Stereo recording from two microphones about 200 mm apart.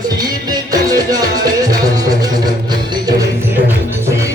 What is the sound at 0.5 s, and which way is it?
Music, 20° right (ahead or behind).